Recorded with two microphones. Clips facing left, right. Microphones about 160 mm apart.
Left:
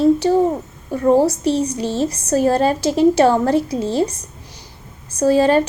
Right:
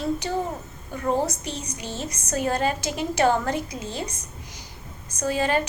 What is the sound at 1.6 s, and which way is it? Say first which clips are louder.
A woman's voice: left 13 dB; 30° left (ahead or behind).